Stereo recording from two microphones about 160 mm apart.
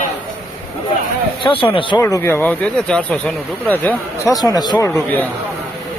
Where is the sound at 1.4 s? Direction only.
30° left (ahead or behind).